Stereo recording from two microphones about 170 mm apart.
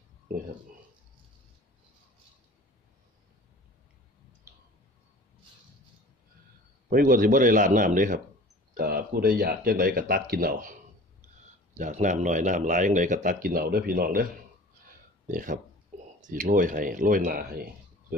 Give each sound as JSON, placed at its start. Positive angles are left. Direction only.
{"t": 6.9, "sound": "speech", "side_deg": -55}
{"t": 8.7, "sound": "speech", "side_deg": -65}
{"t": 15.2, "sound": "speech", "side_deg": -50}